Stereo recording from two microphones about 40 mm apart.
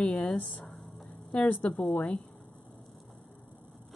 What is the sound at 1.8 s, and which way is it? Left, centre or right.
Speech, left.